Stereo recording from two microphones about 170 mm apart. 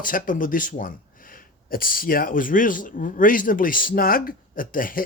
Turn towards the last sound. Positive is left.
turn(degrees=55)  # may be behind; listen again after turning